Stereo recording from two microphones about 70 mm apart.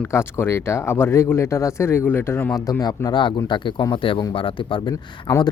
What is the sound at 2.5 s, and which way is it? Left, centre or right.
A man's voice, left.